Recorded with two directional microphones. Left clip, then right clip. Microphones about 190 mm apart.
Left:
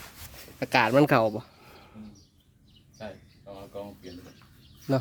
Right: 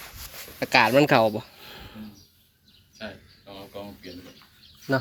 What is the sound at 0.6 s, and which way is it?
Speech, 15° left (ahead or behind).